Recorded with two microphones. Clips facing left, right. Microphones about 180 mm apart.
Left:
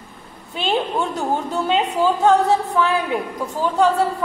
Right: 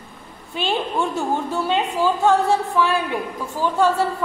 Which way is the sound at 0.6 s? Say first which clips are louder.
Left 2 dB; 20° left (ahead or behind).